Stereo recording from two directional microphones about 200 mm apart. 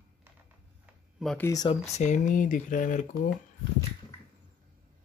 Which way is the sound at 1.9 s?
35° left (ahead or behind).